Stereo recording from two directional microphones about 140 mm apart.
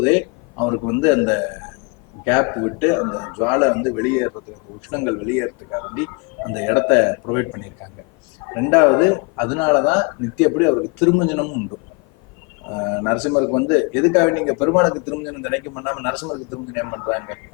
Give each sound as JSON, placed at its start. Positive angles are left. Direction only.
{"t": 0.0, "sound": "speech", "side_deg": 10}
{"t": 12.7, "sound": "speech", "side_deg": 15}